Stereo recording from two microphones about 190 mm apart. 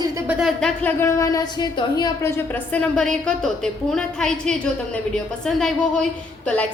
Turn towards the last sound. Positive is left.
turn(degrees=5)  # may be behind; listen again after turning